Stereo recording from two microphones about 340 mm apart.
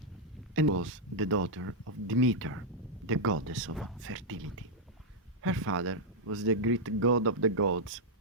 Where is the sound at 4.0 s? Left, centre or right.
Right.